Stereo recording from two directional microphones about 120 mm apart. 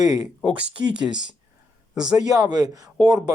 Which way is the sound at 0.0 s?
35° right (ahead or behind).